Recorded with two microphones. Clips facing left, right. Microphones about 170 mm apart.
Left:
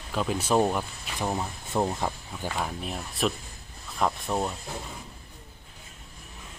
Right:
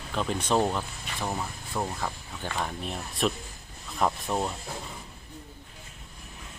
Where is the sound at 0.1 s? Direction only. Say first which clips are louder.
Left 1 dB; 5° left (ahead or behind).